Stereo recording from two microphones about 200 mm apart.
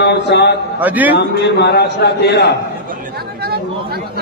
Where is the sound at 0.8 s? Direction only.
10° right (ahead or behind).